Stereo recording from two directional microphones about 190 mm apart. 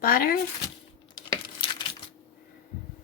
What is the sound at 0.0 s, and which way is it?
Speech, 50° left (ahead or behind).